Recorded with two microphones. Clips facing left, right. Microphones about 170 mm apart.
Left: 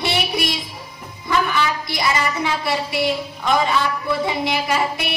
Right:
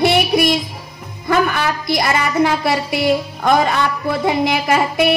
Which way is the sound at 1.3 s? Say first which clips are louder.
Right 4 dB; 55° right (ahead or behind).